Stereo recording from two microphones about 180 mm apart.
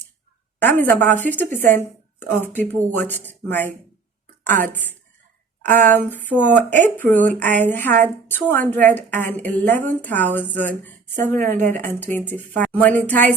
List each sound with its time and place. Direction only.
0.6 s a woman's voice: 10° left (ahead or behind)